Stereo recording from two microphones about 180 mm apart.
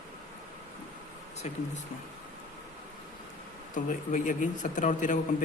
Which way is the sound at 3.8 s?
45° left (ahead or behind).